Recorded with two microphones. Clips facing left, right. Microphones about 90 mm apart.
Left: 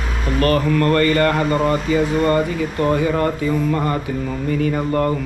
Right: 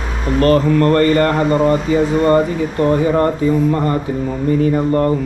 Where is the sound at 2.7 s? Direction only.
35° right (ahead or behind).